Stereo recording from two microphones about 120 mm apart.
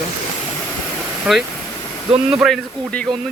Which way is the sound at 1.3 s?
5° right (ahead or behind).